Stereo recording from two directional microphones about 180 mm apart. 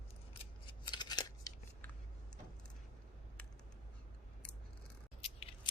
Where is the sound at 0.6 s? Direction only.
25° left (ahead or behind).